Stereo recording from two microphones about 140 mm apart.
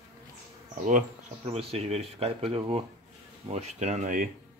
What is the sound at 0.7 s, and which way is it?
Speech, 65° right (ahead or behind).